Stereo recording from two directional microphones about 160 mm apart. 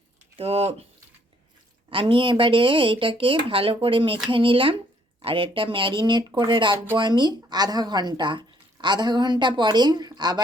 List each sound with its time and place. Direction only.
0.3 s speech: 40° right (ahead or behind)
1.9 s speech: 30° right (ahead or behind)